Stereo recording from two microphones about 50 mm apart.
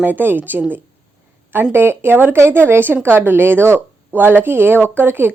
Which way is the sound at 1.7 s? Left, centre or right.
Right.